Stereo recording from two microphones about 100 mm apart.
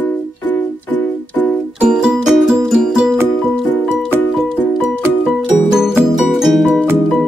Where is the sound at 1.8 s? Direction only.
5° right (ahead or behind).